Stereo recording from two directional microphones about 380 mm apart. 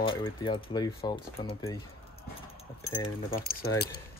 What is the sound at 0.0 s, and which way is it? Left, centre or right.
Speech, centre.